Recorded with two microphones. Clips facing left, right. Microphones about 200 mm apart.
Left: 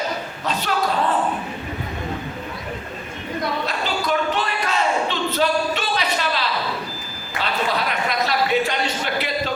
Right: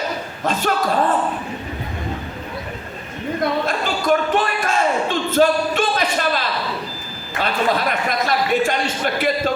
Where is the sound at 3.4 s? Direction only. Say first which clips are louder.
Right 4 dB; 50° right (ahead or behind).